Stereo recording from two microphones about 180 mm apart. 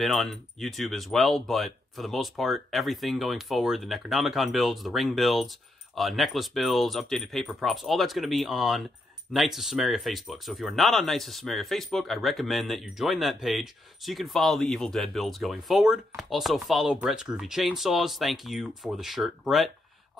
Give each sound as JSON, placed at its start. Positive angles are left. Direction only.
{"t": 0.0, "sound": "speech", "side_deg": 0}